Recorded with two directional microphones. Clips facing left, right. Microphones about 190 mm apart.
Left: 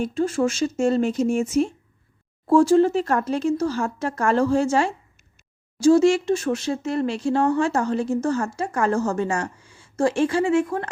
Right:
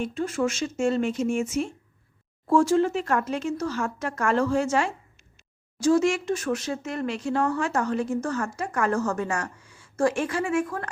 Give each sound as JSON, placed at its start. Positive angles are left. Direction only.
{"t": 0.0, "sound": "speech", "side_deg": 35}